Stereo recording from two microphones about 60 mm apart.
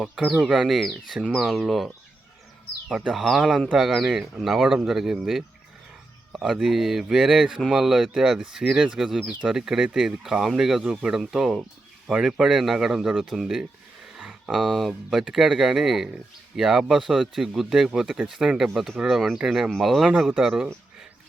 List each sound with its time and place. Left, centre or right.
0.0 s speech: centre
2.9 s speech: centre
14.6 s speech: centre
15.1 s speech: centre